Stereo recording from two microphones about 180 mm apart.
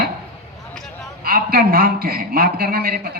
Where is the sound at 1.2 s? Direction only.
55° right (ahead or behind).